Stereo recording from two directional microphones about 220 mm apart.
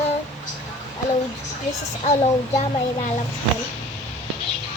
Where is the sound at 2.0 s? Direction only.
30° left (ahead or behind).